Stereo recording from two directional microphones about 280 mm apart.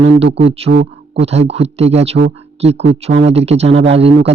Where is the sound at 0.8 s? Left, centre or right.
Right.